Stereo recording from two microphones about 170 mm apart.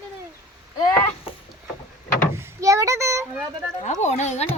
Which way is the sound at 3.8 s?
45° left (ahead or behind).